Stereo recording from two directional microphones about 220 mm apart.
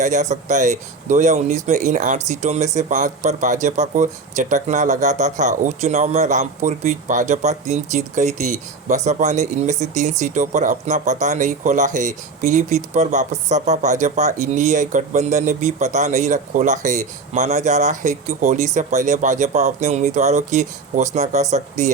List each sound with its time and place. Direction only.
0.0 s speech: 35° right (ahead or behind)